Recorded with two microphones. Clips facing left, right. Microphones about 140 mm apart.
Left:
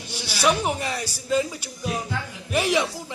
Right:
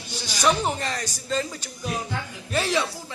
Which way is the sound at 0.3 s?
10° left (ahead or behind).